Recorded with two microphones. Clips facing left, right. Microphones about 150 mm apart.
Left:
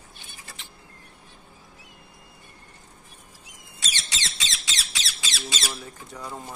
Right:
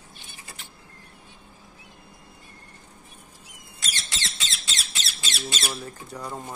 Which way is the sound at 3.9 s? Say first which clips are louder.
Even; 75° left (ahead or behind).